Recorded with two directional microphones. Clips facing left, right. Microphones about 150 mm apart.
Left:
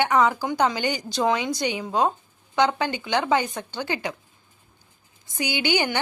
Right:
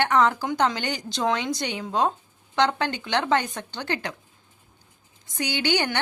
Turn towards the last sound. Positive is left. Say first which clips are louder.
# left 1 dB
turn(degrees=10)  # may be behind; listen again after turning